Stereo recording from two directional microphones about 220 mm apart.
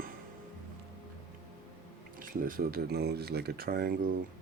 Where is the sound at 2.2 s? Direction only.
40° right (ahead or behind).